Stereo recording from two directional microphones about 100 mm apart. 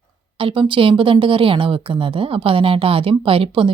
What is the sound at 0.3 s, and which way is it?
A woman's voice, 60° right (ahead or behind).